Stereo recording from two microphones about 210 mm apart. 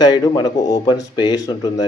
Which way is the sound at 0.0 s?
20° left (ahead or behind).